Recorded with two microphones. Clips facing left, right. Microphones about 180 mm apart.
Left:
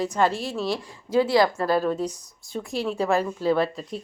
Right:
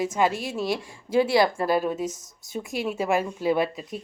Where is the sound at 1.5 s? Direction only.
15° right (ahead or behind).